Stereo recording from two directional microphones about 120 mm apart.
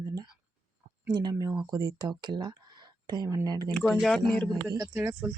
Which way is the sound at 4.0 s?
Centre (ahead or behind).